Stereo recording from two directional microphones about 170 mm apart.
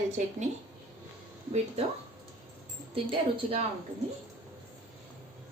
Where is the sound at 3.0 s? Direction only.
35° right (ahead or behind).